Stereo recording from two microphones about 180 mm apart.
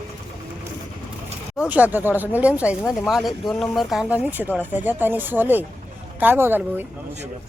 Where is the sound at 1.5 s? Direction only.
10° right (ahead or behind).